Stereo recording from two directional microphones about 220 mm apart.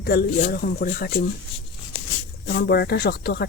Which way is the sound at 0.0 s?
45° left (ahead or behind).